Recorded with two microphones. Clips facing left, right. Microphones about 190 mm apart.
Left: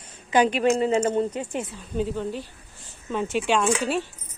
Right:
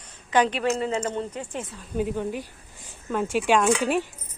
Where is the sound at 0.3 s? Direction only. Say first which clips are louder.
Left 2 dB; 10° left (ahead or behind).